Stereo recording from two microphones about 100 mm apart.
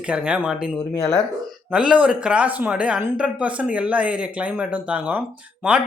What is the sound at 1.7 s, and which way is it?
A man's voice, 10° right (ahead or behind).